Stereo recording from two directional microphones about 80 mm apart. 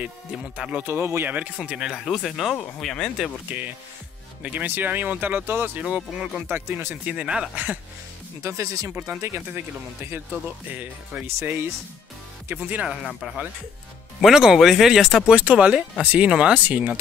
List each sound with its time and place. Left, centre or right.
0.0 s speech: centre
0.8 s speech: right
1.6 s speech: centre
3.4 s speech: right
5.8 s speech: centre
6.4 s speech: right
7.1 s speech: centre
8.4 s speech: right
8.9 s speech: right
10.7 s speech: centre
11.2 s speech: right
12.9 s speech: centre
15.3 s speech: centre